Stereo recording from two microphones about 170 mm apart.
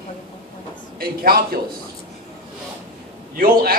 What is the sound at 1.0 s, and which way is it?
Speech, 60° right (ahead or behind).